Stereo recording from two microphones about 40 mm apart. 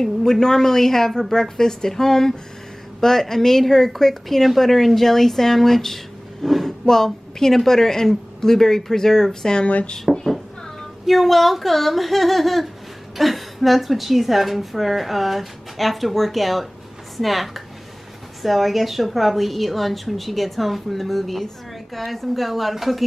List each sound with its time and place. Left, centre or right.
0.0 s speech: centre
10.1 s a sound: centre
11.1 s a woman's voice: centre